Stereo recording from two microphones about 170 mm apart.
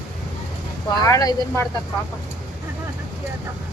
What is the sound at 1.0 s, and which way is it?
Speech, 20° left (ahead or behind).